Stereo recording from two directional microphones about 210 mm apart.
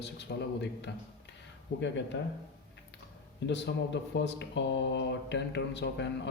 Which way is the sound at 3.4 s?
55° left (ahead or behind).